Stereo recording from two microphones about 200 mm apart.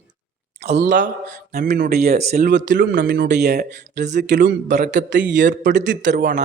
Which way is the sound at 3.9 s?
35° right (ahead or behind).